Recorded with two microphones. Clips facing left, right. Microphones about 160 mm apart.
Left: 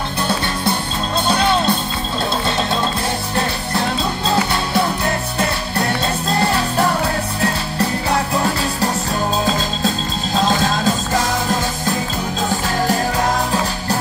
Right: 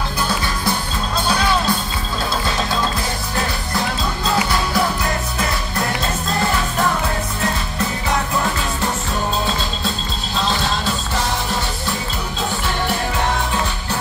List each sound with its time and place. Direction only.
1.3 s music: 25° left (ahead or behind)
10.3 s music: 45° left (ahead or behind)